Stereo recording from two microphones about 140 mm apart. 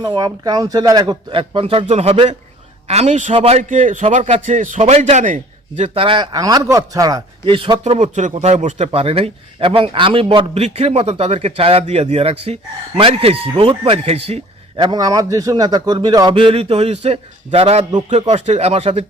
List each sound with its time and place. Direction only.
0.1 s a man's voice: 30° right (ahead or behind); by 3.3 s 55° right (ahead or behind)
3.3 s a man's voice: 45° right (ahead or behind)
3.6 s a man's voice: 65° right (ahead or behind); by 6.2 s 40° right (ahead or behind)
6.3 s a man's voice: 25° right (ahead or behind)
7.4 s a man's voice: 35° right (ahead or behind)
7.9 s a man's voice: 60° right (ahead or behind)
8.9 s a man's voice: 45° right (ahead or behind)